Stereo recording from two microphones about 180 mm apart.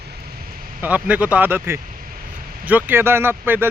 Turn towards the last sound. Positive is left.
turn(degrees=-10)  # may be behind; listen again after turning